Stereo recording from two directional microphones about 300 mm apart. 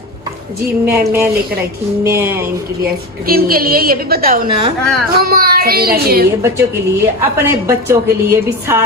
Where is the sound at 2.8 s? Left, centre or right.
Right.